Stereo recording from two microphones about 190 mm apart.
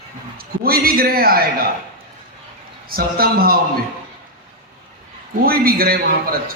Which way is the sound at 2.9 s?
50° right (ahead or behind).